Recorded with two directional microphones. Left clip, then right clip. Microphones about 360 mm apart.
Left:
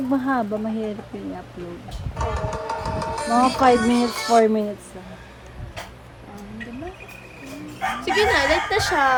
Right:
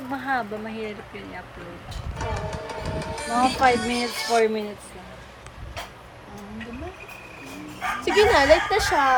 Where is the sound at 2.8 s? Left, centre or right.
Centre.